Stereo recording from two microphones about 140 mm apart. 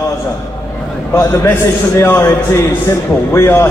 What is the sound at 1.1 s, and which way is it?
A man's voice, 20° left (ahead or behind).